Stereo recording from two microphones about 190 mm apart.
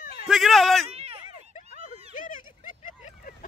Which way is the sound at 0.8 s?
30° right (ahead or behind).